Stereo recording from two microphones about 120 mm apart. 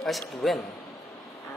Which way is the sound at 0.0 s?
Centre (ahead or behind).